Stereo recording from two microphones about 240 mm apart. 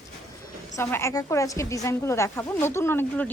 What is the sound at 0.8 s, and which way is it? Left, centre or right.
A woman's voice, centre.